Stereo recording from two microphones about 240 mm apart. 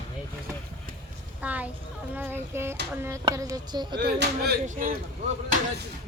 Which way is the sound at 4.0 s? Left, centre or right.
Right.